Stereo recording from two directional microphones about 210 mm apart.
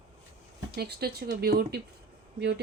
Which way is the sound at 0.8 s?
50° right (ahead or behind).